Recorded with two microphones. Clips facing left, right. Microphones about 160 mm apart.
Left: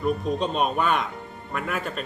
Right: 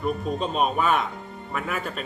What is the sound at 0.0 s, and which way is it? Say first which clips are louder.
A man's voice: left 2 dB; centre (ahead or behind).